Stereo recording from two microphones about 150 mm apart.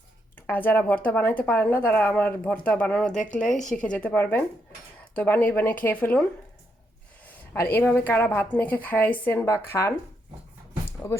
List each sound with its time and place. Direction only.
0.4 s speech: 15° left (ahead or behind)
7.5 s speech: 15° left (ahead or behind)
11.0 s speech: 20° left (ahead or behind)